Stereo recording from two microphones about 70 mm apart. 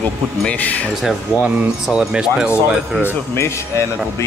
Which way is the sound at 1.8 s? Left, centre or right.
Centre.